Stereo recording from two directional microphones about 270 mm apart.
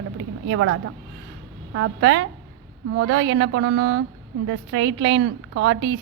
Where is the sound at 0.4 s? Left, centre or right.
Right.